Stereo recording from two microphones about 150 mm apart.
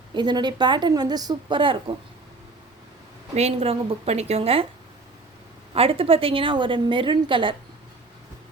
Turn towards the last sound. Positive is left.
turn(degrees=-35)  # may be behind; listen again after turning